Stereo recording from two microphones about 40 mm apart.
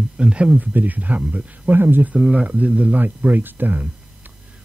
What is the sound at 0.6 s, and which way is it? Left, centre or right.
Speech, right.